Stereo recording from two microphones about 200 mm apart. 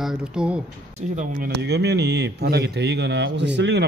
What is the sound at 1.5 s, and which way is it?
Speech, 55° right (ahead or behind).